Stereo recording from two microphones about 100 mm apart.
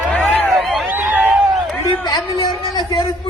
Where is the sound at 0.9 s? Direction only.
15° right (ahead or behind).